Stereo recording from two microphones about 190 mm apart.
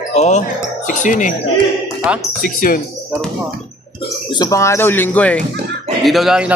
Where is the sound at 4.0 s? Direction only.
20° left (ahead or behind).